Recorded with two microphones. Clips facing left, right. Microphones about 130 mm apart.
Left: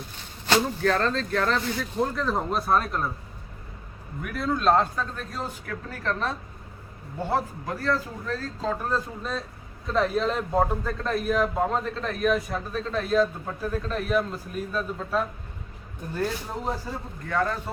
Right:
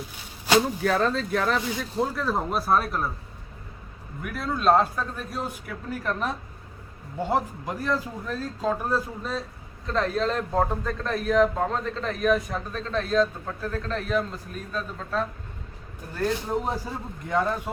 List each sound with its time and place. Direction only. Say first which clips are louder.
0.4 s a man's voice: right 1 dB; 10° right (ahead or behind)
4.2 s a man's voice: left 1 dB; centre (ahead or behind)
17.2 s a man's voice: right 1 dB; 20° right (ahead or behind)